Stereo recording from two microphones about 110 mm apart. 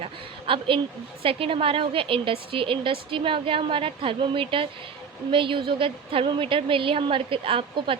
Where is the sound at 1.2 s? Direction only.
55° right (ahead or behind).